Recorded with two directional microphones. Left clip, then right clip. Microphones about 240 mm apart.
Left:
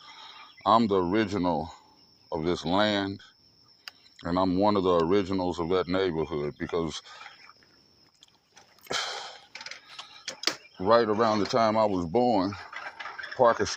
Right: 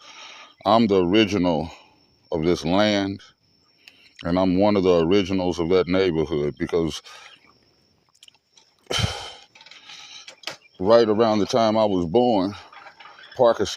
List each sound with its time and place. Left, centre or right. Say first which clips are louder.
0.0 s speech: right 5 dB; right
8.9 s a sound: right 5 dB; right
10.8 s speech: right 6 dB; right